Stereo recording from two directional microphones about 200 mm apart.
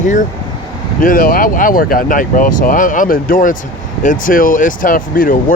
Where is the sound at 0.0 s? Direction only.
40° left (ahead or behind).